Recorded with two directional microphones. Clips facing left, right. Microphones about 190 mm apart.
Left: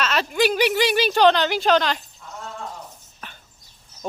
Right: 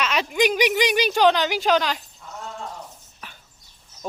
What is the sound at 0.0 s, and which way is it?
A woman's voice, 10° right (ahead or behind).